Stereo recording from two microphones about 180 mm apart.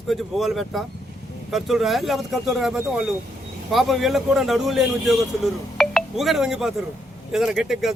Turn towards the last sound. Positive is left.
turn(degrees=0)  # may be behind; listen again after turning